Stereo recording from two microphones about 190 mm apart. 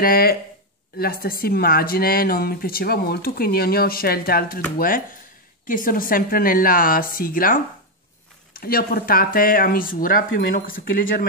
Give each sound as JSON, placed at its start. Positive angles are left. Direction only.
{"t": 0.0, "sound": "speech", "side_deg": 50}
{"t": 8.5, "sound": "speech", "side_deg": 50}